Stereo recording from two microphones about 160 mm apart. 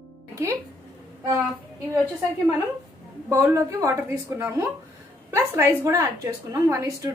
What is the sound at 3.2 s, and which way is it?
A woman's voice, 20° right (ahead or behind).